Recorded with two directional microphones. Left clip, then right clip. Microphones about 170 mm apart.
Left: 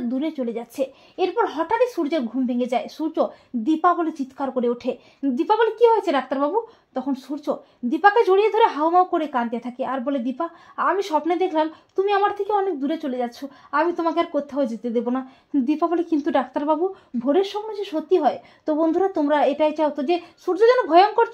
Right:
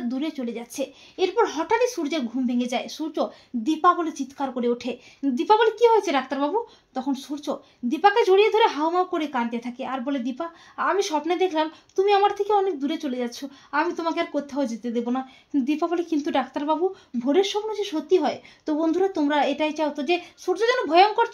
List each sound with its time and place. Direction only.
0.1 s speech: 30° left (ahead or behind)